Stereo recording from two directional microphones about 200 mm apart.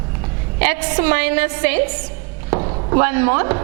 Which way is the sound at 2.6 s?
30° right (ahead or behind).